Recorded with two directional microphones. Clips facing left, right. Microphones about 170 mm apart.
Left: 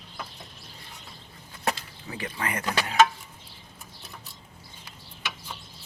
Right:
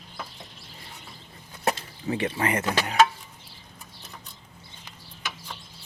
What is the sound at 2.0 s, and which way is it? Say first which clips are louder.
Speech: right 7 dB; 25° right (ahead or behind).